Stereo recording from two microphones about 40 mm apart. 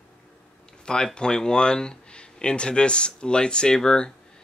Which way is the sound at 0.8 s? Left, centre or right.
Left.